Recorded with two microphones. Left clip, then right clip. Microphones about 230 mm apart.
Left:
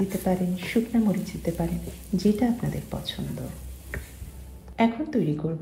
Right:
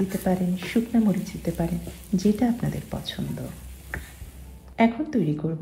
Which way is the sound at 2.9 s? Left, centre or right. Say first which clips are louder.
Even; right.